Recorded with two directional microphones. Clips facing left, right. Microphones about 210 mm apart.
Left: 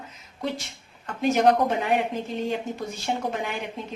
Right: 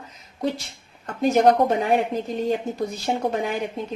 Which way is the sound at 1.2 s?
40° right (ahead or behind).